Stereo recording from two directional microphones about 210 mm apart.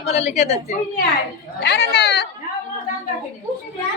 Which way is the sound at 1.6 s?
55° left (ahead or behind).